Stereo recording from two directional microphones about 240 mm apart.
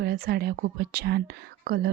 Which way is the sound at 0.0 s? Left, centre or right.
Right.